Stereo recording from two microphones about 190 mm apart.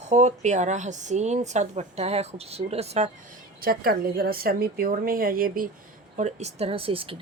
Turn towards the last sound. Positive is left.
turn(degrees=-30)  # may be behind; listen again after turning